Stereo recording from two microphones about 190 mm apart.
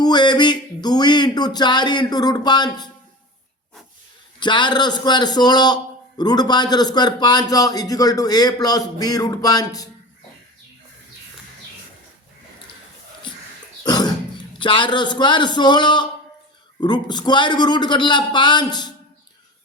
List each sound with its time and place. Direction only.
0.0 s a sound: 20° left (ahead or behind)
4.4 s a man's voice: 25° left (ahead or behind)
13.8 s dog: 20° left (ahead or behind)
14.6 s a man's voice: 25° left (ahead or behind)